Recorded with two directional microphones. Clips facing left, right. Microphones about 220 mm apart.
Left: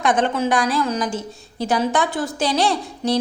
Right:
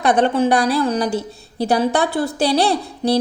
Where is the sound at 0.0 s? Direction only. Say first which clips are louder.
Right 4 dB; 35° right (ahead or behind).